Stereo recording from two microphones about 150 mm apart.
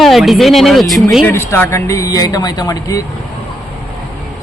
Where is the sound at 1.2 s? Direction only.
15° left (ahead or behind).